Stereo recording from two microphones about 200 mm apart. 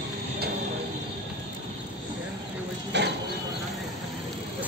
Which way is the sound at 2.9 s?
60° right (ahead or behind).